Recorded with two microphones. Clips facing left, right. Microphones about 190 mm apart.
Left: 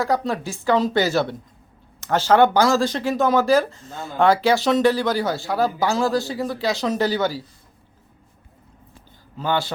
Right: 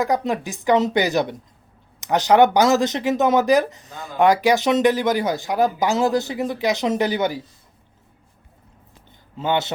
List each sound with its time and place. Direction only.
0.0 s speech: 20° right (ahead or behind)
9.4 s a man's voice: 20° right (ahead or behind)